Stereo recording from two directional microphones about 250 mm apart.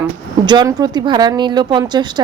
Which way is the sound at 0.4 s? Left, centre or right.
Centre.